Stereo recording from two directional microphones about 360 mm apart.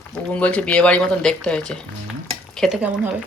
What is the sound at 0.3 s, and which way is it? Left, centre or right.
Speech, centre.